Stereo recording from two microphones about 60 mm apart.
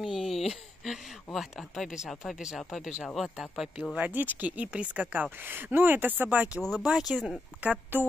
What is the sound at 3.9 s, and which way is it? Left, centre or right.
Speech, right.